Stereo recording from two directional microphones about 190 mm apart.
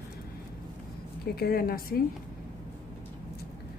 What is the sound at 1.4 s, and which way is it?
Speech, 50° left (ahead or behind).